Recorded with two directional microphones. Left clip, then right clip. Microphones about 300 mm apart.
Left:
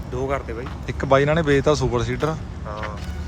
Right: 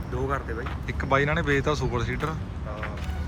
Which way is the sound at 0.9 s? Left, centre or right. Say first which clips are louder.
Left 6 dB; centre.